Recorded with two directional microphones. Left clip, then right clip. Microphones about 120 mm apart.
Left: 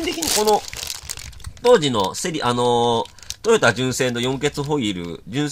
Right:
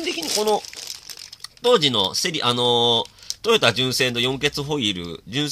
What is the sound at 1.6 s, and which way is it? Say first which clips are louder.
Speech: left 2 dB; 10° right (ahead or behind).